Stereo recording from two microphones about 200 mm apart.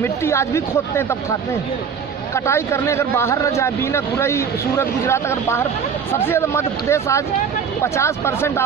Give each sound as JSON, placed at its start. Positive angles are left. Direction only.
{"t": 0.0, "sound": "speech", "side_deg": 15}
{"t": 2.3, "sound": "speech", "side_deg": 15}